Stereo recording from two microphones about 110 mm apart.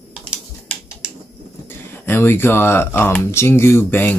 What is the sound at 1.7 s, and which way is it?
Speech, 20° left (ahead or behind).